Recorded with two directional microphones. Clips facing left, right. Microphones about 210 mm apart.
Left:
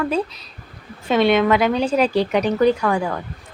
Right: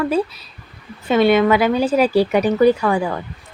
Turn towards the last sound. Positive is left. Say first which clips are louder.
# right 2 dB
turn(degrees=-5)  # may be behind; listen again after turning